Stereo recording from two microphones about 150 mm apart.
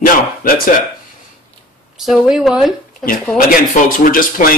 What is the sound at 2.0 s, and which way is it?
Speech, centre (ahead or behind).